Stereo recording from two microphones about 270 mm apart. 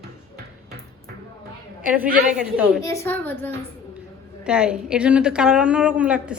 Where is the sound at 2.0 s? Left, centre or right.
Right.